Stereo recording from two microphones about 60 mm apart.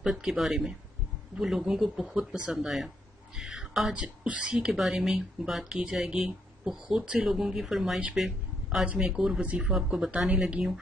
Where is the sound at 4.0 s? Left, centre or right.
Right.